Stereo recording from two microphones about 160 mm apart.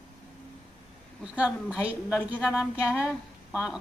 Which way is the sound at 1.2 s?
5° right (ahead or behind).